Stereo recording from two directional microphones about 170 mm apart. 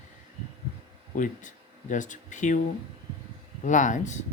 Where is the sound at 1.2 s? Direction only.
50° left (ahead or behind).